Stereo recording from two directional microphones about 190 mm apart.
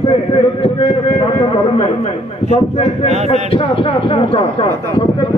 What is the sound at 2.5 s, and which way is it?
Speech, 35° left (ahead or behind).